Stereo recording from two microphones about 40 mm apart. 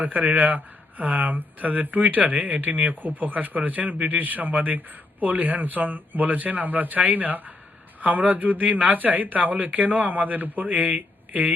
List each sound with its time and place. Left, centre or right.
0.0 s speech: right